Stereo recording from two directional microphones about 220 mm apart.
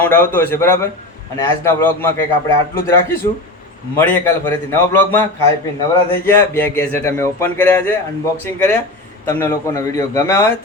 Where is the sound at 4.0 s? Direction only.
10° left (ahead or behind).